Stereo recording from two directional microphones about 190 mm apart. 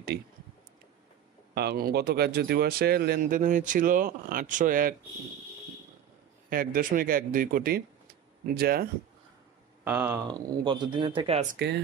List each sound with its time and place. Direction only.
1.5 s speech: 55° right (ahead or behind)
6.5 s speech: 50° right (ahead or behind)
9.8 s speech: 10° right (ahead or behind)
10.4 s speech: 20° right (ahead or behind)
11.5 s speech: 65° right (ahead or behind)